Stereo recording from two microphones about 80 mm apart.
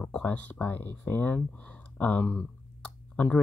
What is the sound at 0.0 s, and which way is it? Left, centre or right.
Speech, centre.